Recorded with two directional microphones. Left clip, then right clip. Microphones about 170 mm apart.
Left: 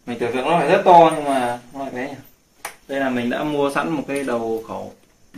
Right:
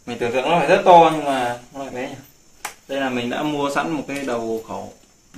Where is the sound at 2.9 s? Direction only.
25° left (ahead or behind).